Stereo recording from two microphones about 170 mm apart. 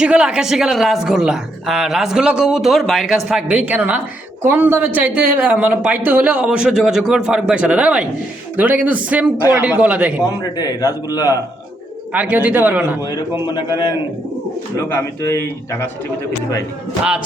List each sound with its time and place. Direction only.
0.0 s speech: 5° right (ahead or behind)
10.2 s a man's voice: 20° left (ahead or behind)
12.1 s speech: 10° right (ahead or behind)
14.8 s a man's voice: 15° left (ahead or behind)